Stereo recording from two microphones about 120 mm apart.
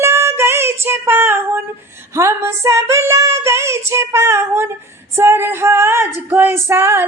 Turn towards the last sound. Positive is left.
turn(degrees=-20)  # may be behind; listen again after turning